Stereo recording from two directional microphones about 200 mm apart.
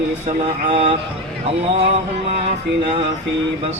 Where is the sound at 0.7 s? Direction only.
35° right (ahead or behind).